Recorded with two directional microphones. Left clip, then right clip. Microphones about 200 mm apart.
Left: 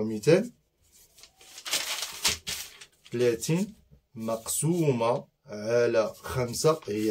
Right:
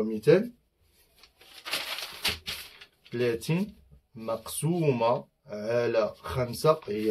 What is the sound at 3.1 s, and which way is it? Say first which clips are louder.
Speech: left 3 dB; 15° left (ahead or behind).